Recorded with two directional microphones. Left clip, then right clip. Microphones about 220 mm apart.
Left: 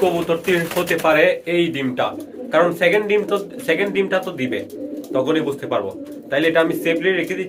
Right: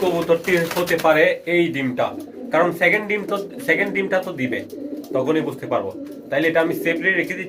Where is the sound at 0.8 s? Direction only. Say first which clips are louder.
Left 1 dB; centre (ahead or behind).